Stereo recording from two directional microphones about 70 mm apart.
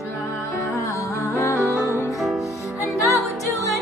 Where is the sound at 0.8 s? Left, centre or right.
Left.